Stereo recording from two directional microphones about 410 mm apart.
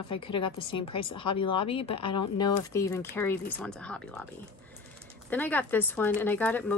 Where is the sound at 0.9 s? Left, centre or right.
Left.